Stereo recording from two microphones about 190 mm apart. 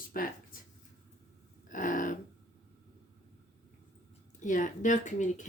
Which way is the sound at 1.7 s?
45° left (ahead or behind).